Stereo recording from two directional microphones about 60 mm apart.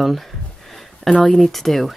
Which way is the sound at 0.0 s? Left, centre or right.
Centre.